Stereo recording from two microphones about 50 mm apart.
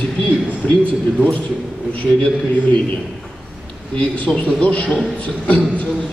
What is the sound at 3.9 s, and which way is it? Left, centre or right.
Speech, left.